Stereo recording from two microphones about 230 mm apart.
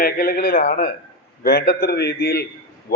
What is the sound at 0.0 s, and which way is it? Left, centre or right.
A man's voice, left.